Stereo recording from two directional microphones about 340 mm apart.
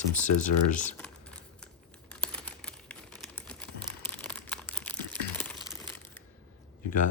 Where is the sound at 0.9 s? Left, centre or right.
Centre.